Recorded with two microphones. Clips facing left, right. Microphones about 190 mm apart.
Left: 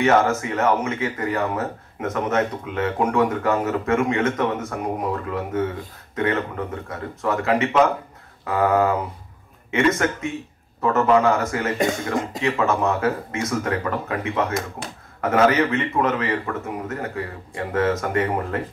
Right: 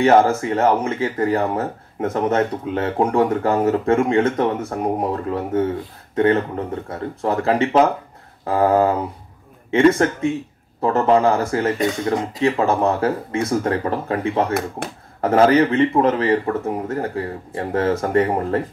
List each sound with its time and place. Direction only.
0.0 s speech: 30° right (ahead or behind)
11.8 s speech: 50° left (ahead or behind)
12.4 s speech: 30° right (ahead or behind)